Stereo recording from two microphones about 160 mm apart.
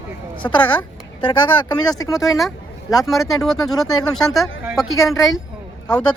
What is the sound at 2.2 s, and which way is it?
Speech, centre (ahead or behind).